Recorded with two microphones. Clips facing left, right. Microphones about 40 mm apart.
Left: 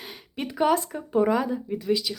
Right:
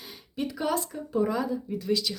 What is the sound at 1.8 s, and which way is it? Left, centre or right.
Speech, centre.